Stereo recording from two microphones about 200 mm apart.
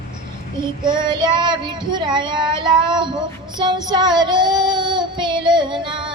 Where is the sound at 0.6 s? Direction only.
20° right (ahead or behind).